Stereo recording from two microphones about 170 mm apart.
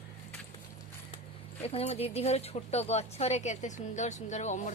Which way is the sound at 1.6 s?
35° left (ahead or behind).